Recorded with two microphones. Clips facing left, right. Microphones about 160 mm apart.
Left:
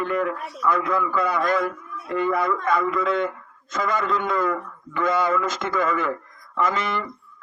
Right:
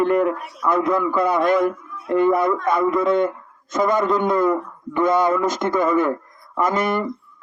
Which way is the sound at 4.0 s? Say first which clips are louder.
Right 6 dB; 45° right (ahead or behind).